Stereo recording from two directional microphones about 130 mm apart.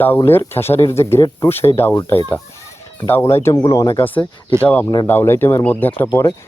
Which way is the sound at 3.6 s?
30° left (ahead or behind).